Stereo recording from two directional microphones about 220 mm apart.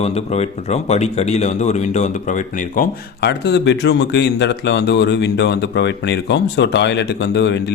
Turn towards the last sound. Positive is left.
turn(degrees=50)  # may be behind; listen again after turning